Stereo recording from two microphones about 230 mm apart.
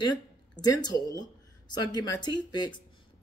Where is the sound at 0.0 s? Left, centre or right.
Centre.